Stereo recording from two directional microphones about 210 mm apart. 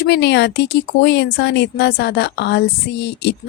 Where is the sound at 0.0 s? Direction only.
55° left (ahead or behind).